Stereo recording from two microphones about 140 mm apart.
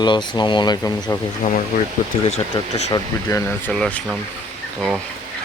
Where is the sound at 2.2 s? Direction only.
50° left (ahead or behind).